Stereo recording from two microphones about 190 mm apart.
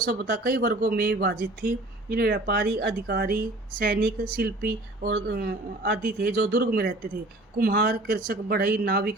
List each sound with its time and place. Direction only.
0.0 s speech: 50° right (ahead or behind)